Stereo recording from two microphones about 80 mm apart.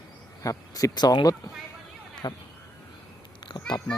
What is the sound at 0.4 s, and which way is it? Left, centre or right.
Speech, left.